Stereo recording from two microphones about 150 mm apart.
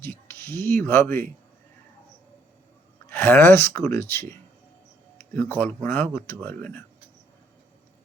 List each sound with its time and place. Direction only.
0.0 s speech: 15° left (ahead or behind)
3.1 s speech: 15° left (ahead or behind)
5.1 s a sound: 15° left (ahead or behind)
5.5 s speech: 15° left (ahead or behind)